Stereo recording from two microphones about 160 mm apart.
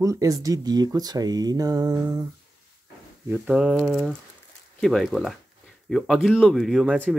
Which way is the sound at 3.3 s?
5° right (ahead or behind).